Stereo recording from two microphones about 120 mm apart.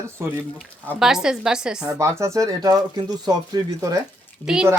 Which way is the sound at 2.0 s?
25° right (ahead or behind).